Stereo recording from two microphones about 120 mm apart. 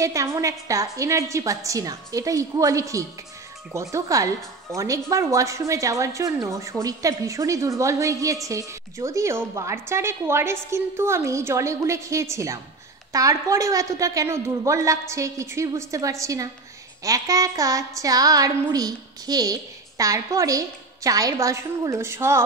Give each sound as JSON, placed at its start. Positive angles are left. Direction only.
{"t": 0.0, "sound": "a woman's voice", "side_deg": -25}